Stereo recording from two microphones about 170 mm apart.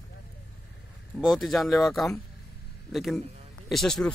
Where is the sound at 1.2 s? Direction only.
Centre (ahead or behind).